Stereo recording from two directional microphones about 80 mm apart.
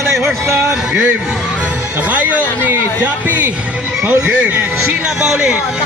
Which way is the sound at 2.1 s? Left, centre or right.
Centre.